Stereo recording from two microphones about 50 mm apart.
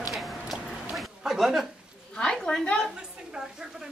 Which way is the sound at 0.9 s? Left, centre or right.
Centre.